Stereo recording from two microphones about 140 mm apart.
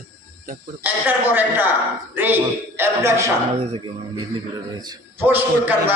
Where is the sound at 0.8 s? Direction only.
15° right (ahead or behind).